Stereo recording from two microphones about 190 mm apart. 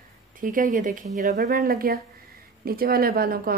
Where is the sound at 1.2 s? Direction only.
55° right (ahead or behind).